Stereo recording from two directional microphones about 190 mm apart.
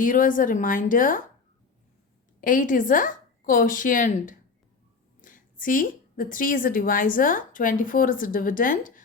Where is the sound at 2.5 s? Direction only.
45° left (ahead or behind).